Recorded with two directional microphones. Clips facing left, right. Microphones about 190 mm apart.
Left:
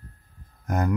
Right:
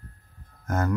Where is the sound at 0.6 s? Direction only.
15° left (ahead or behind).